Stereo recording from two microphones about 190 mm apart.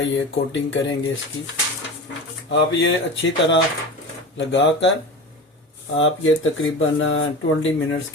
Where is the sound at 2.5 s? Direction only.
75° left (ahead or behind).